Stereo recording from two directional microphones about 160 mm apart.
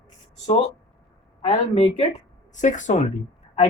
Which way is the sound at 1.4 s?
35° left (ahead or behind).